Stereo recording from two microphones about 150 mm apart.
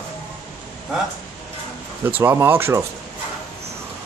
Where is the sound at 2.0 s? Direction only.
15° right (ahead or behind).